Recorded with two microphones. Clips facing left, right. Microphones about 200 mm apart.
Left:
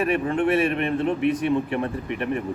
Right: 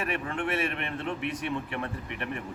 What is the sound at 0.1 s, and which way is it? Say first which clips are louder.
A man's voice: left 10 dB; 40° left (ahead or behind).